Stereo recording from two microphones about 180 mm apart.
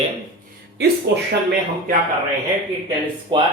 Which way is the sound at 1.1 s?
70° right (ahead or behind).